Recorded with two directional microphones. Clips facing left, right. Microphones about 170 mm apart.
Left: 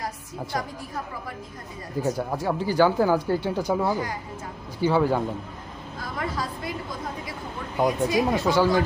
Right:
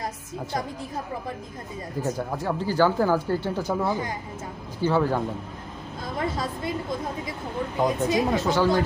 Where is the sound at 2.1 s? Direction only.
10° left (ahead or behind).